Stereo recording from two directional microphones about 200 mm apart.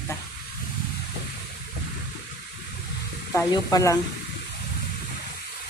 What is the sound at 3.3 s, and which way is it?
Speech, 15° left (ahead or behind).